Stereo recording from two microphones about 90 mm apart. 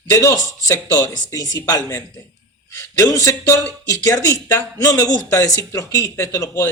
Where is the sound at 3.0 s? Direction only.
40° left (ahead or behind).